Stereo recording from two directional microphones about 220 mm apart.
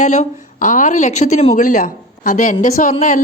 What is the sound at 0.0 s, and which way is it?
A woman's voice, 30° left (ahead or behind).